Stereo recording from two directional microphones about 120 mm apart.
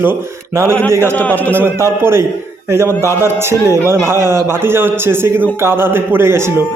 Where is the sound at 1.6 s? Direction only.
20° right (ahead or behind).